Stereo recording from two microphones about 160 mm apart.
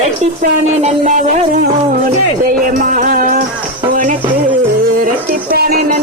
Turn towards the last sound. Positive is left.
turn(degrees=-75)  # may be behind; listen again after turning